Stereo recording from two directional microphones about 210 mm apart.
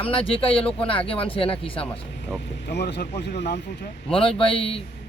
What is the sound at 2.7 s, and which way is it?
Speech, 50° left (ahead or behind).